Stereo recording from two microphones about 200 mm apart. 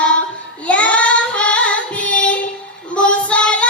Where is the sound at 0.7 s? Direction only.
5° left (ahead or behind).